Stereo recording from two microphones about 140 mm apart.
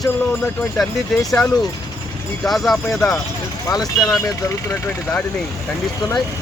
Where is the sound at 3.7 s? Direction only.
25° left (ahead or behind).